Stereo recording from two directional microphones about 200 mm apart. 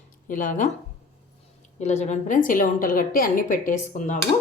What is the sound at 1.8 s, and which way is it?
A woman's voice, 35° left (ahead or behind).